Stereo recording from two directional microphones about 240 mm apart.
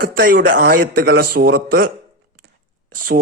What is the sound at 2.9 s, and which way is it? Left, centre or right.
Speech, right.